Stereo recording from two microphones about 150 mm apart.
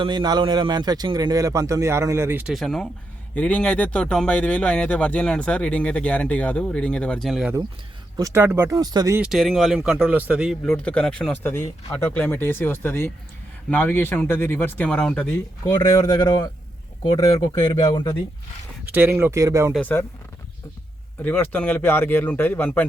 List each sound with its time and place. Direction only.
0.0 s a man's voice: 30° right (ahead or behind); by 2.5 s 15° right (ahead or behind)
2.5 s speech: centre (ahead or behind)
8.1 s a man's voice: 20° right (ahead or behind)
9.1 s speech: 5° right (ahead or behind)
10.8 s speech: 10° left (ahead or behind)
16.0 s speech: 25° left (ahead or behind)
18.9 s speech: 10° right (ahead or behind)
19.8 s speech: 15° left (ahead or behind)
21.2 s speech: 10° left (ahead or behind)